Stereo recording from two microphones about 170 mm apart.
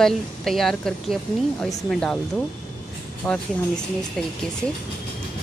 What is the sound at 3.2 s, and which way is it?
Speech, 5° left (ahead or behind).